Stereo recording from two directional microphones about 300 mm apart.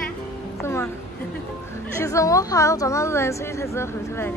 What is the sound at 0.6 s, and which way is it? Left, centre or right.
Music, centre.